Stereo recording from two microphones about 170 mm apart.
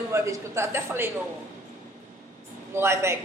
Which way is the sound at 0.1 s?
15° right (ahead or behind).